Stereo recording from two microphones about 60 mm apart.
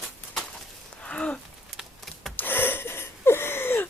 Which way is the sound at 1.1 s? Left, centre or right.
Centre.